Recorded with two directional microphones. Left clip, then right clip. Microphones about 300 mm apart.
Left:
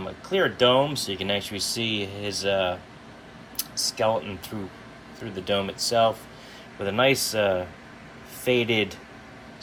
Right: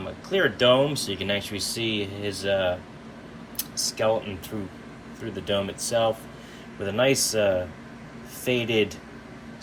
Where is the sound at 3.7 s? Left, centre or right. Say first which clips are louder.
Left 1 dB; left.